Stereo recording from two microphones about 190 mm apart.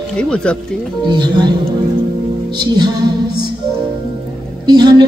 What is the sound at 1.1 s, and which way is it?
Speech, 25° right (ahead or behind).